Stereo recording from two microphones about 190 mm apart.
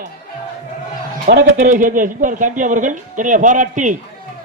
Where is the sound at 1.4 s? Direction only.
40° right (ahead or behind).